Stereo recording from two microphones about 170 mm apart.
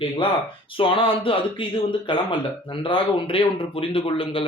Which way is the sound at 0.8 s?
30° left (ahead or behind).